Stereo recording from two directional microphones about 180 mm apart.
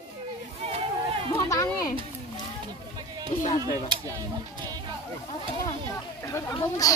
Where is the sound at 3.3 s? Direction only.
45° left (ahead or behind).